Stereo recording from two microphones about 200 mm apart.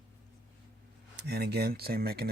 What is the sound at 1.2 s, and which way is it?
Speech, 55° right (ahead or behind).